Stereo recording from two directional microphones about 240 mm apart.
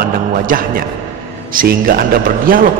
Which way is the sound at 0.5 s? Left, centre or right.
Right.